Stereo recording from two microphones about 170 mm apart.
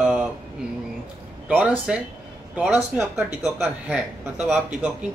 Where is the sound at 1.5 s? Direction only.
10° right (ahead or behind).